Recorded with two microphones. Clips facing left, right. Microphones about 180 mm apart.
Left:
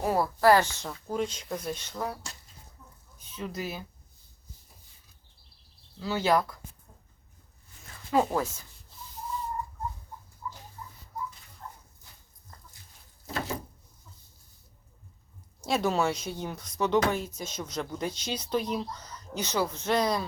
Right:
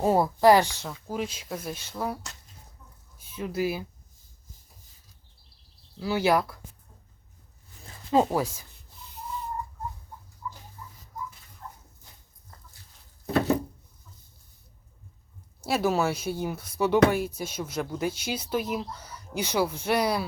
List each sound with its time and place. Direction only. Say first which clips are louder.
0.0 s speech: right 4 dB; 25° right (ahead or behind)
0.3 s speech: right 1 dB; 15° right (ahead or behind)
3.2 s speech: right 6 dB; 10° right (ahead or behind)
6.0 s speech: right 2 dB; 10° right (ahead or behind)
7.8 s zipper: right 3 dB; 25° right (ahead or behind)
8.3 s speech: right 2 dB; 10° right (ahead or behind)
13.2 s a sound: right 10 dB; 65° right (ahead or behind)
15.6 s speech: right 2 dB; 5° right (ahead or behind)